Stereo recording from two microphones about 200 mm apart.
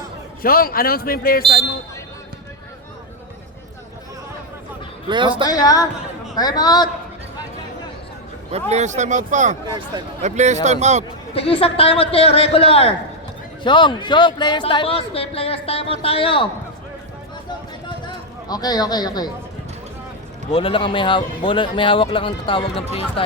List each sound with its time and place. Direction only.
0.4 s speech: 45° left (ahead or behind)
5.0 s speech: 25° right (ahead or behind)
5.5 s a man's voice: 20° left (ahead or behind)
8.5 s a man's voice: 35° right (ahead or behind)
11.3 s a man's voice: 30° left (ahead or behind)
18.4 s a man's voice: 20° left (ahead or behind)
20.5 s a man's voice: 25° left (ahead or behind)